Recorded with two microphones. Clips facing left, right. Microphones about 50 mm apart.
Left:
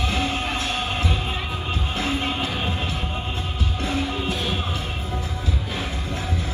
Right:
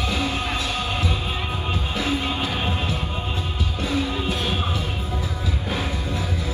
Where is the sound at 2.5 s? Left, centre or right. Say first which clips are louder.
Right 1 dB; right.